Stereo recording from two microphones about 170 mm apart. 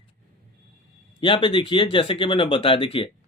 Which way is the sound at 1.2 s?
30° left (ahead or behind).